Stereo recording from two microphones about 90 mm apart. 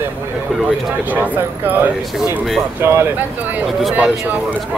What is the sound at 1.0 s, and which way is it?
Speech, 20° right (ahead or behind).